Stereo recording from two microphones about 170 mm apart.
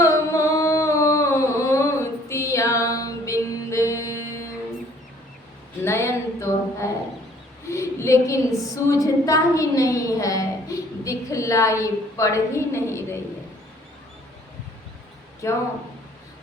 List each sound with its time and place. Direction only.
0.0 s music: 20° left (ahead or behind)
5.8 s a sound: 15° left (ahead or behind)
15.4 s speech: 15° left (ahead or behind)